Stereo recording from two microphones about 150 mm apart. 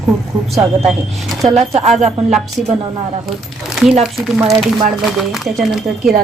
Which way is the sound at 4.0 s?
Centre (ahead or behind).